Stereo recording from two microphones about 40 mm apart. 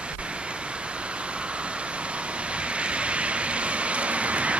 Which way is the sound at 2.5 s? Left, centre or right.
Right.